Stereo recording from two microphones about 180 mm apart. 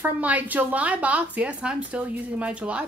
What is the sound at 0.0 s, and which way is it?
A woman's voice, 10° right (ahead or behind).